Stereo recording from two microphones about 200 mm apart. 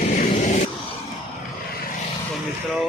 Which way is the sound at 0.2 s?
35° left (ahead or behind).